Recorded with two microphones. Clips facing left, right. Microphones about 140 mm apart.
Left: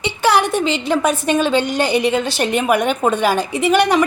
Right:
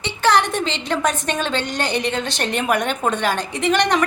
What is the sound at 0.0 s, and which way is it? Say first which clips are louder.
A woman's voice: left 2 dB; 10° left (ahead or behind).